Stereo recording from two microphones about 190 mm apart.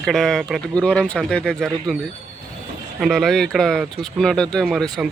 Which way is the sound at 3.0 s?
Centre (ahead or behind).